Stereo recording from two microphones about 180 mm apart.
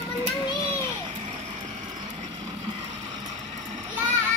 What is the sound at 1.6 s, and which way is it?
Vehicle, 45° right (ahead or behind).